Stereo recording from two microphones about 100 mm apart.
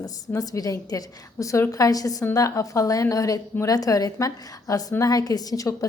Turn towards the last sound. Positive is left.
turn(degrees=35)  # may be behind; listen again after turning